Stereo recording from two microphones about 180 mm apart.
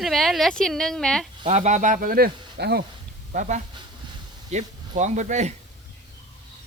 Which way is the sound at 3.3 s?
45° right (ahead or behind).